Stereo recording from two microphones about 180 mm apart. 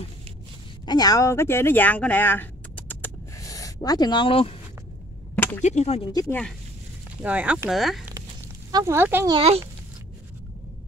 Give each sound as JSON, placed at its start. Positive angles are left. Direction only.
{"t": 0.8, "sound": "speech", "side_deg": 20}
{"t": 5.3, "sound": "a sound", "side_deg": 10}
{"t": 5.6, "sound": "speech", "side_deg": 40}
{"t": 7.2, "sound": "speech", "side_deg": -5}
{"t": 8.7, "sound": "speech", "side_deg": -15}
{"t": 9.3, "sound": "speech", "side_deg": -35}